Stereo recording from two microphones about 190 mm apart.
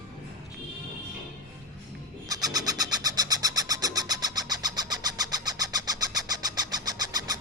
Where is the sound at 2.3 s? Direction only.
20° right (ahead or behind).